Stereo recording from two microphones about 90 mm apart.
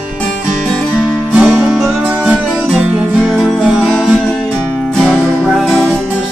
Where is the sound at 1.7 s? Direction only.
Centre (ahead or behind).